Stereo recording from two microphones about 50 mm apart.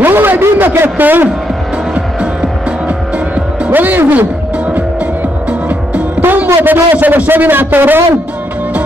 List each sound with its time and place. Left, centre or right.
0.0 s a man's voice: right
3.7 s a man's voice: right
6.2 s a man's voice: right